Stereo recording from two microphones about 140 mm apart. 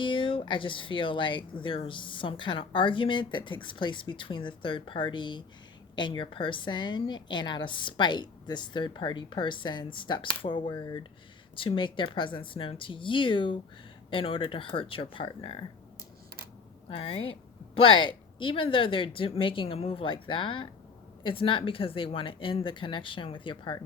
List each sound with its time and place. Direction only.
0.0 s speech: 35° left (ahead or behind)
16.9 s speech: 35° left (ahead or behind)